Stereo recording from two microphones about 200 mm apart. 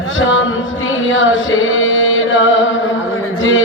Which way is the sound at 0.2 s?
75° left (ahead or behind).